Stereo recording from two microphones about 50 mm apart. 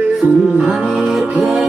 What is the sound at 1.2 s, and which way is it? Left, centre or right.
Music, right.